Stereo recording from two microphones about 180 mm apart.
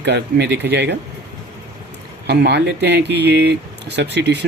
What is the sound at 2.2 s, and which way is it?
Speech, 70° right (ahead or behind).